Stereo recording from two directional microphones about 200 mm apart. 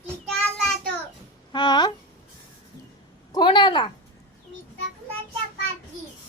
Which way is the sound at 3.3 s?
20° left (ahead or behind).